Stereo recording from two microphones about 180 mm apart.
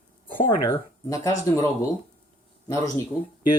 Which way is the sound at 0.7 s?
20° left (ahead or behind).